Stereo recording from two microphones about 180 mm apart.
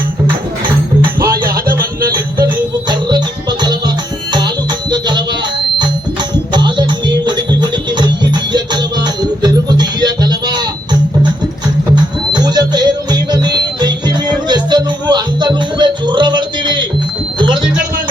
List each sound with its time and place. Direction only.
2.9 s music: 25° right (ahead or behind)
6.3 s music: 25° right (ahead or behind)
12.3 s music: 20° right (ahead or behind)